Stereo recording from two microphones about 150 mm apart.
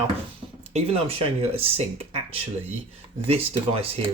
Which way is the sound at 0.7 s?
40° right (ahead or behind).